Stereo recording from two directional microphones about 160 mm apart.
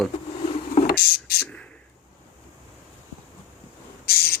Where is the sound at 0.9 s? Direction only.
80° left.